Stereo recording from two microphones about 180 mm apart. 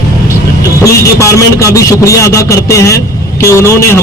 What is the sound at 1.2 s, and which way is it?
A man's voice, 15° left (ahead or behind).